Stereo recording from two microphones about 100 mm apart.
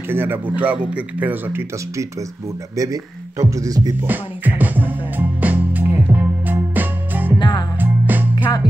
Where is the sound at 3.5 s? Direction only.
35° right (ahead or behind).